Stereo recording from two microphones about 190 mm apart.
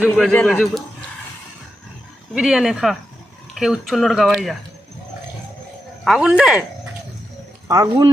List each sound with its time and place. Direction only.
0.3 s speech: 10° left (ahead or behind)
2.3 s speech: 5° right (ahead or behind)
6.1 s speech: centre (ahead or behind)
7.7 s speech: 20° right (ahead or behind)